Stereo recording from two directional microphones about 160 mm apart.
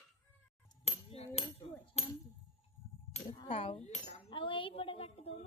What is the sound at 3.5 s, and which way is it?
Speech, 40° left (ahead or behind).